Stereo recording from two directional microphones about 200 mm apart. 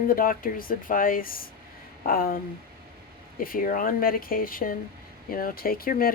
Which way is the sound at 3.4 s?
45° left (ahead or behind).